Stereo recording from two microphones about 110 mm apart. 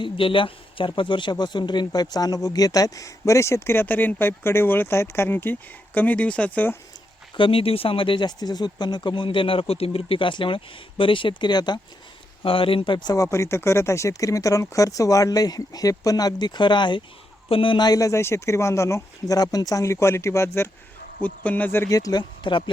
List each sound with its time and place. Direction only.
0.0 s speech: 50° left (ahead or behind); by 6.7 s 15° left (ahead or behind)
7.3 s speech: 55° left (ahead or behind)
12.4 s speech: 55° left (ahead or behind); by 20.7 s 25° left (ahead or behind)
21.2 s speech: 15° left (ahead or behind)
21.8 s speech: 35° left (ahead or behind)